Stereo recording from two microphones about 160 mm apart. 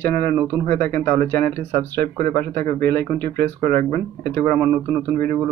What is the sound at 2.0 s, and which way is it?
Speech, 55° right (ahead or behind).